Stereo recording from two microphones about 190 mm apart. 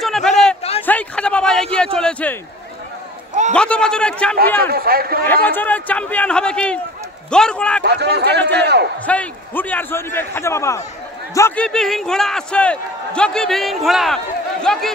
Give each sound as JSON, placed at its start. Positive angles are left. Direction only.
{"t": 0.0, "sound": "a sound", "side_deg": 0}
{"t": 2.0, "sound": "a man's voice", "side_deg": 5}
{"t": 3.5, "sound": "a man's voice", "side_deg": 5}
{"t": 4.6, "sound": "speech", "side_deg": -50}
{"t": 5.2, "sound": "a man's voice", "side_deg": 10}
{"t": 7.8, "sound": "speech", "side_deg": -60}
{"t": 9.0, "sound": "a man's voice", "side_deg": 5}